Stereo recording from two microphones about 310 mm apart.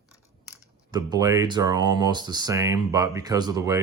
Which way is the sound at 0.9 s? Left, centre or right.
Centre.